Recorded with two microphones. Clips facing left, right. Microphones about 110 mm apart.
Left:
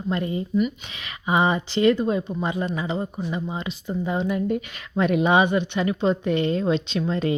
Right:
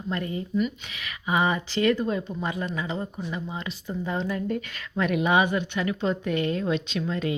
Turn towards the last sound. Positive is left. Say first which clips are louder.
# left 4 dB
turn(degrees=30)  # may be behind; listen again after turning